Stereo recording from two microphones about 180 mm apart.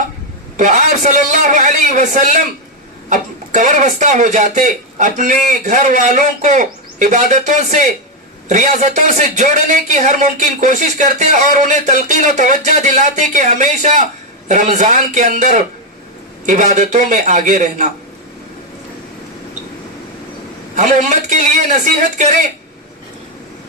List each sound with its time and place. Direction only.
0.5 s a man's voice: 40° right (ahead or behind)
20.7 s a man's voice: 40° right (ahead or behind)